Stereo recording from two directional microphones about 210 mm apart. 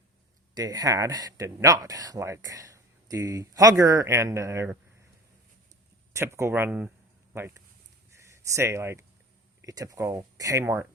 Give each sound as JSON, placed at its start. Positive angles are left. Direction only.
{"t": 0.5, "sound": "speech", "side_deg": -20}
{"t": 6.1, "sound": "speech", "side_deg": -15}